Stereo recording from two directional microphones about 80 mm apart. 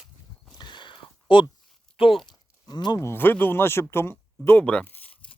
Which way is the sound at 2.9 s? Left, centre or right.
Left.